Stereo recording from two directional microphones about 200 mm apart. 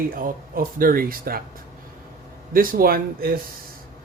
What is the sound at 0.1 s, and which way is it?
Speech, 45° right (ahead or behind).